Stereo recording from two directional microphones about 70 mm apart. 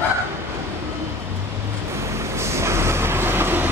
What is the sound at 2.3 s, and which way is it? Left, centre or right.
Train, right.